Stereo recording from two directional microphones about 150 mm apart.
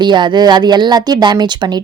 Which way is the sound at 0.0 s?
30° right (ahead or behind).